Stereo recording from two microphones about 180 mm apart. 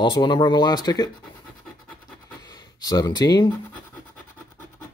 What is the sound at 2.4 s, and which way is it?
Speech, 20° left (ahead or behind).